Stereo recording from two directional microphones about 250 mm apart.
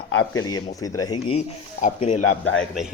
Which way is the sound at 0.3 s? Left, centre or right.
Centre.